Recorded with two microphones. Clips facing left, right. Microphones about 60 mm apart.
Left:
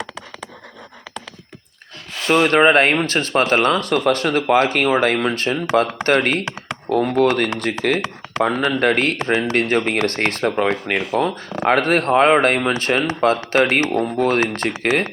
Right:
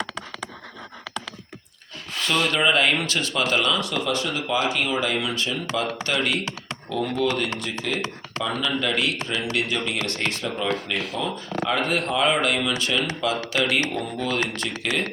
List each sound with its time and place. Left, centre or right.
2.2 s speech: left